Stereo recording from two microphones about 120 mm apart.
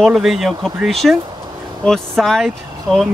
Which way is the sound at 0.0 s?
Centre (ahead or behind).